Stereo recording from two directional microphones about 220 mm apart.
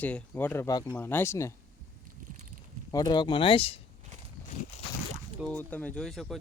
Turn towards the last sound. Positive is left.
turn(degrees=0)  # may be behind; listen again after turning